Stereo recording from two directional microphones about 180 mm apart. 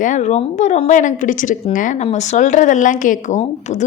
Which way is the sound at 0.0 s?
45° left (ahead or behind).